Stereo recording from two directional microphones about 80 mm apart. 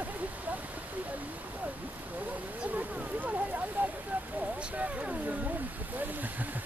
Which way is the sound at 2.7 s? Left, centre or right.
Right.